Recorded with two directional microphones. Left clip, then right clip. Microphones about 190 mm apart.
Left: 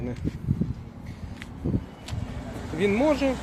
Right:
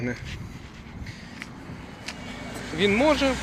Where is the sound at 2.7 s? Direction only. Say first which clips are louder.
Right 2 dB; centre (ahead or behind).